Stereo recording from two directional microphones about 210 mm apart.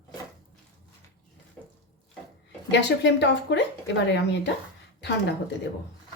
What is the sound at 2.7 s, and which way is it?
A woman's voice, 55° left (ahead or behind).